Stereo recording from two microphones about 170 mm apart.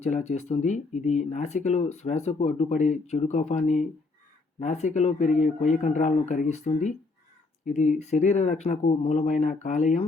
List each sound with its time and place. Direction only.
0.0 s speech: 45° left (ahead or behind)